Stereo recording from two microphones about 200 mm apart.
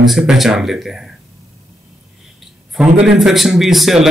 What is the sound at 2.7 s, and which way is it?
Speech, 5° right (ahead or behind).